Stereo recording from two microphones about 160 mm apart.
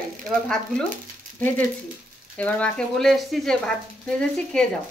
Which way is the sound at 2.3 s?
10° left (ahead or behind).